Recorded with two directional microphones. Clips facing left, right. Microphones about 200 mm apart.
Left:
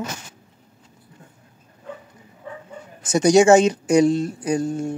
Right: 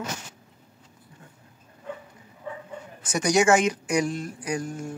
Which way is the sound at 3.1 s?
30° left (ahead or behind).